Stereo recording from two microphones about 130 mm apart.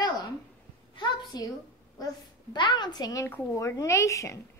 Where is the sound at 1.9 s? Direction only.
30° left (ahead or behind).